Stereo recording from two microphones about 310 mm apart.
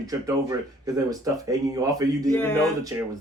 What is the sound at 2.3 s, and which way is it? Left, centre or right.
Speech, centre.